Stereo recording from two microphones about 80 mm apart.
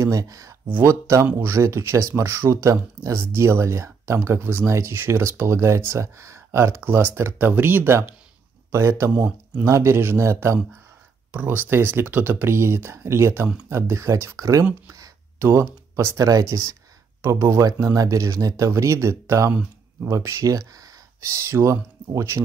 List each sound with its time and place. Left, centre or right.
0.0 s speech: right
9.1 s speech: centre
9.7 s speech: right
11.3 s speech: right
15.3 s speech: right
21.5 s speech: right